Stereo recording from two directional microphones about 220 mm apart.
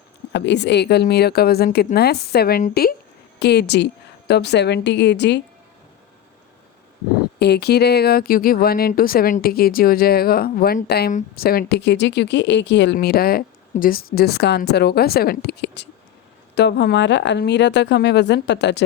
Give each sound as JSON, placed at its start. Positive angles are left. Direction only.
{"t": 0.3, "sound": "speech", "side_deg": 50}
{"t": 7.3, "sound": "speech", "side_deg": 50}